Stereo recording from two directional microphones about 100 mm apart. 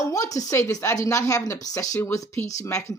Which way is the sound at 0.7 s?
35° left (ahead or behind).